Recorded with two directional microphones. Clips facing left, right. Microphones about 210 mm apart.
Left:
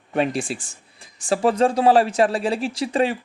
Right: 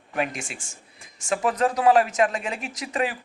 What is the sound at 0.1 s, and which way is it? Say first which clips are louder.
Speech: left 6 dB; 30° left (ahead or behind).